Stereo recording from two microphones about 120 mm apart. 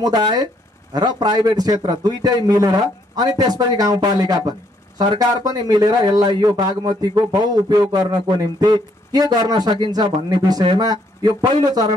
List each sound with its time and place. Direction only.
0.0 s speech: 35° right (ahead or behind)